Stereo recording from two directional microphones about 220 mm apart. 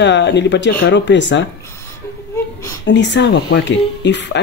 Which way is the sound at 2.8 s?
55° left (ahead or behind).